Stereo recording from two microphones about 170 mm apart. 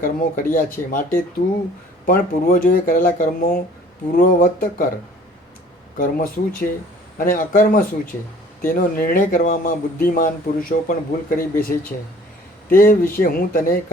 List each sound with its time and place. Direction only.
0.0 s speech: 55° left (ahead or behind)
2.0 s speech: 55° left (ahead or behind)
6.0 s speech: 55° left (ahead or behind)